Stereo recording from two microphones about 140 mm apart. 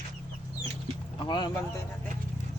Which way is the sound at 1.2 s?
35° left (ahead or behind).